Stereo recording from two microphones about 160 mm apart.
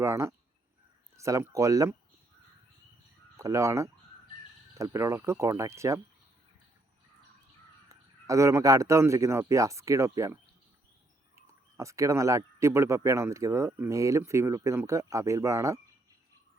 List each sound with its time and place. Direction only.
0.0 s speech: 15° right (ahead or behind)
3.3 s speech: 20° right (ahead or behind)
7.9 s speech: 20° right (ahead or behind)
11.3 s speech: 20° right (ahead or behind)